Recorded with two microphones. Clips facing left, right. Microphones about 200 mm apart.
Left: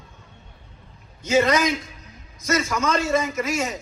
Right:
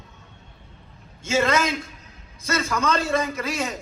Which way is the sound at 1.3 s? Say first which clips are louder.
Left 3 dB; 15° left (ahead or behind).